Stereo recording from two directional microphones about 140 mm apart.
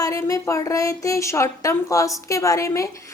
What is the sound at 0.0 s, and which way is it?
A woman's voice, 25° left (ahead or behind).